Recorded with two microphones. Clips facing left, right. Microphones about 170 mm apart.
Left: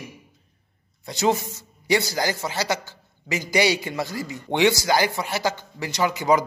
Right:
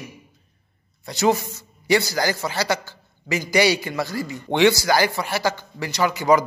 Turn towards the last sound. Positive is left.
turn(degrees=20)  # may be behind; listen again after turning